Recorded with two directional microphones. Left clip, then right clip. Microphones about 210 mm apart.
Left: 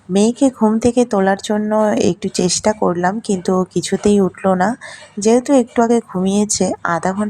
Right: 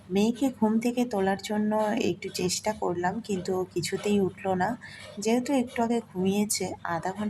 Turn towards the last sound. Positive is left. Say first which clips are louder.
# left 13 dB
turn(degrees=25)  # may be behind; listen again after turning